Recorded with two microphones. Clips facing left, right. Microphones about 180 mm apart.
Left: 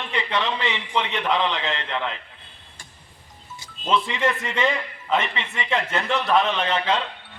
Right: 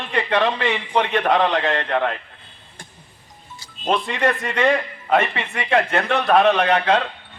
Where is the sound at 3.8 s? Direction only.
55° right (ahead or behind).